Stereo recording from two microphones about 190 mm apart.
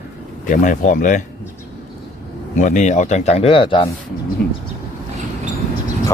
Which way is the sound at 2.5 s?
40° left (ahead or behind).